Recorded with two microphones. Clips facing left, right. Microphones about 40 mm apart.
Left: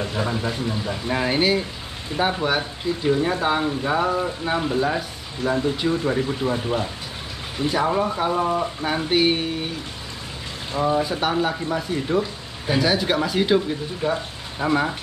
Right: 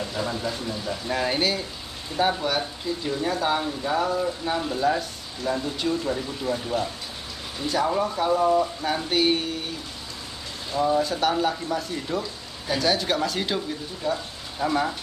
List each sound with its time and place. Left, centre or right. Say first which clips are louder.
0.0 s speech: left 3 dB; left
10.7 s speech: left 1 dB; left
14.0 s speech: left 3 dB; left